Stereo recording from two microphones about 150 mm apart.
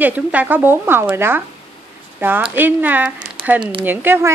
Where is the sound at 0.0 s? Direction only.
10° right (ahead or behind).